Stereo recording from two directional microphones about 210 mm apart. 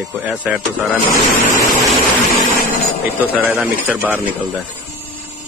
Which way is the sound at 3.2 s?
10° right (ahead or behind).